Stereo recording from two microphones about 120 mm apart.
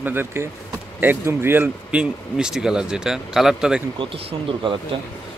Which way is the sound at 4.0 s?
45° right (ahead or behind).